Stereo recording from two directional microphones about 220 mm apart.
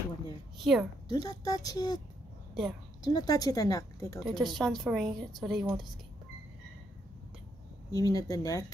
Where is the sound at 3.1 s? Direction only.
15° left (ahead or behind).